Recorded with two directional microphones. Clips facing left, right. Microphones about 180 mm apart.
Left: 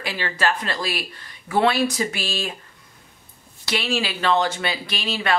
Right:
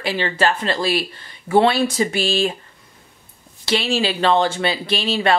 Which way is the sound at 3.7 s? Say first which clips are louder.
Right 5 dB; 30° right (ahead or behind).